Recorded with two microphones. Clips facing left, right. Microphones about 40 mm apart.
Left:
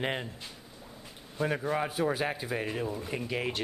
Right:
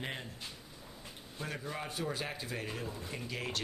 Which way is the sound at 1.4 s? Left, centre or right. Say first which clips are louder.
Left 11 dB; left.